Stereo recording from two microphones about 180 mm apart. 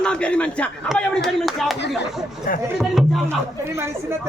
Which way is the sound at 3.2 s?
15° right (ahead or behind).